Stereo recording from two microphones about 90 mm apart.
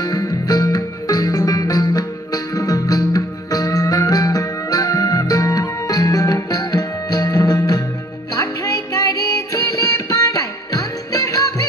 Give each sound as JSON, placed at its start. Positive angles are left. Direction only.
{"t": 0.0, "sound": "music", "side_deg": 50}